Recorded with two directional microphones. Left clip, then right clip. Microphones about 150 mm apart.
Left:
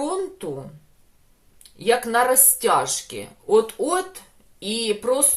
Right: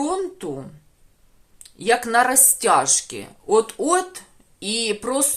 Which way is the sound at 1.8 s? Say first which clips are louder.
Right 1 dB; 40° right (ahead or behind).